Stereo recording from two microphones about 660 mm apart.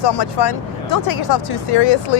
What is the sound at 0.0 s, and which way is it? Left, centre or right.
Speech, left.